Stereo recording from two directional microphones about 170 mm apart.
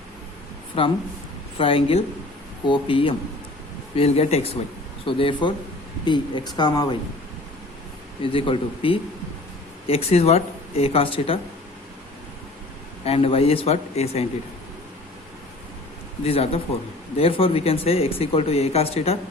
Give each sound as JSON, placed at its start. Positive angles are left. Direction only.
{"t": 0.8, "sound": "speech", "side_deg": 30}
{"t": 8.2, "sound": "speech", "side_deg": 30}
{"t": 13.1, "sound": "speech", "side_deg": 35}
{"t": 16.2, "sound": "speech", "side_deg": 35}